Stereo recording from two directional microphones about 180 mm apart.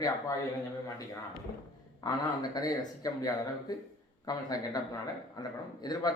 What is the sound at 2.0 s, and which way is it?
Speech, 20° left (ahead or behind).